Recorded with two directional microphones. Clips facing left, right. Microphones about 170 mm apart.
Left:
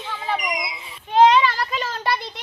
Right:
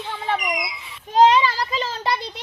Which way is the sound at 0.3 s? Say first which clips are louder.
Right 1 dB; 20° left (ahead or behind).